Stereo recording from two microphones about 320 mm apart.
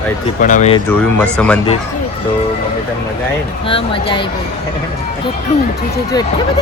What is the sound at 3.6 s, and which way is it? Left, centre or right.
Speech, centre.